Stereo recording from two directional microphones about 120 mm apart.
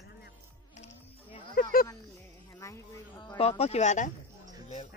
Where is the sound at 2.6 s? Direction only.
25° left (ahead or behind).